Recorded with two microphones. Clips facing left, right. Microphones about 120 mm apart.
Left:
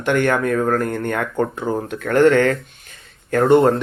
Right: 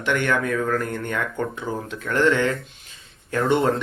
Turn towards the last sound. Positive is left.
turn(degrees=50)  # may be behind; listen again after turning